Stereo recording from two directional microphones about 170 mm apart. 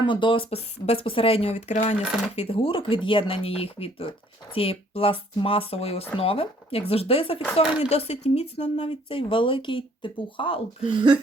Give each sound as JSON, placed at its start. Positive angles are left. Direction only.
{"t": 0.0, "sound": "speech", "side_deg": 30}
{"t": 7.6, "sound": "speech", "side_deg": -5}
{"t": 7.9, "sound": "speech", "side_deg": 40}
{"t": 10.9, "sound": "speech", "side_deg": -30}